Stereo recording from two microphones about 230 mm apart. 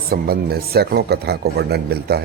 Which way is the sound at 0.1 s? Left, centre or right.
Right.